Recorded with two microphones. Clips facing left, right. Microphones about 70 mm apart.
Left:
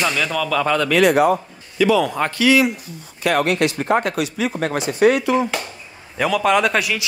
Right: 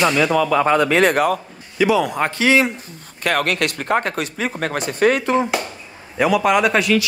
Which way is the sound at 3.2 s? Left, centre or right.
Right.